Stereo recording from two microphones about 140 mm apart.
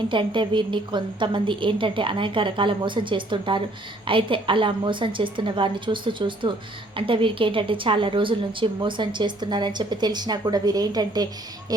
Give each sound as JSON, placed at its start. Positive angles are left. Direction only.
{"t": 0.1, "sound": "a woman's voice", "side_deg": -35}